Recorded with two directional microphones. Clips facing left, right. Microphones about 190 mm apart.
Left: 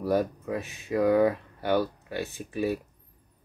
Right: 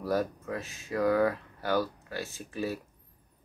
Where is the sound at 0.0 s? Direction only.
15° left (ahead or behind).